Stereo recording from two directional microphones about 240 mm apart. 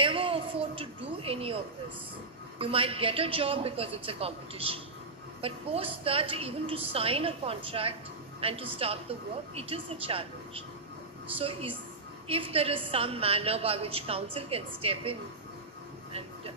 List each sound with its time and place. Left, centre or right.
0.0 s a woman's voice: right
2.6 s a woman's voice: right
16.1 s vehicle: right